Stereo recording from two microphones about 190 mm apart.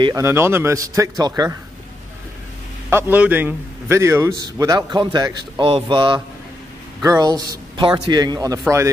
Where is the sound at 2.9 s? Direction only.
10° right (ahead or behind).